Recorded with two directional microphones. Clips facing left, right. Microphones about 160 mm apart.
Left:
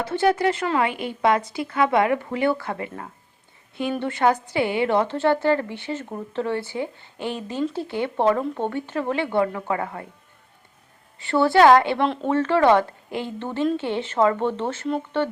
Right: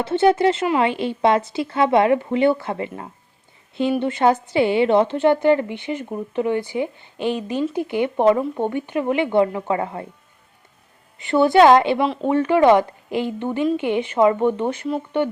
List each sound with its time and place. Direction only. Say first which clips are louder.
0.0 s a woman's voice: right 4 dB; 25° right (ahead or behind)
11.2 s speech: right 3 dB; 20° right (ahead or behind)
11.9 s a woman's voice: right 2 dB; 5° right (ahead or behind)